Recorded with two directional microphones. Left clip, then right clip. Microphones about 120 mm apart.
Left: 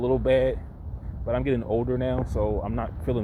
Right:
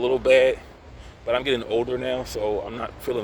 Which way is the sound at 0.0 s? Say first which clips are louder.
Right 5 dB; 30° right (ahead or behind).